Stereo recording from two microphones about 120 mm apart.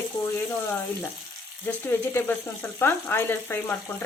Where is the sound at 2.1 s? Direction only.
15° left (ahead or behind).